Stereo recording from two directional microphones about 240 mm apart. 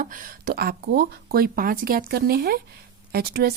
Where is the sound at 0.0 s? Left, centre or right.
Right.